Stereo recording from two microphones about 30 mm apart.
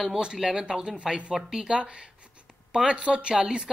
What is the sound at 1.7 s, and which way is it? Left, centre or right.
Speech, right.